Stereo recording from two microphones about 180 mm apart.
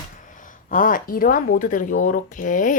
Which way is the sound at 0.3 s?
45° left (ahead or behind).